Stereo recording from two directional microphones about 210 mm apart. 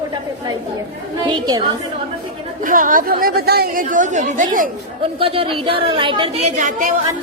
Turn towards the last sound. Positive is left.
turn(degrees=-40)  # may be behind; listen again after turning